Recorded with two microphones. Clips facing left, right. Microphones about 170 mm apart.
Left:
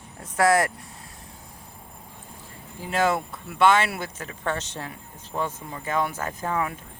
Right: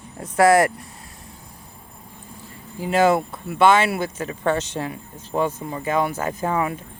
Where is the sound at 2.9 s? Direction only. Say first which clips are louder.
Right 6 dB; 10° right (ahead or behind).